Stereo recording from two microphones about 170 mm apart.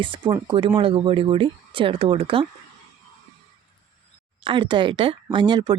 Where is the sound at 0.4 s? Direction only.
30° right (ahead or behind).